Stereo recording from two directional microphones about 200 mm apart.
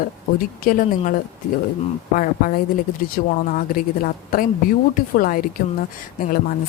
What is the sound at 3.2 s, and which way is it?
Speech, 45° left (ahead or behind).